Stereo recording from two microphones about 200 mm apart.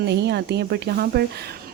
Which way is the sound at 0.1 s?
55° right (ahead or behind).